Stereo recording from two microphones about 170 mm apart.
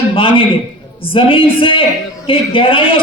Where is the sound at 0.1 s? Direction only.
30° left (ahead or behind).